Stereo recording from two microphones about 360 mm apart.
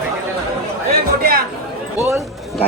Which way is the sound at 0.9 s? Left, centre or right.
Right.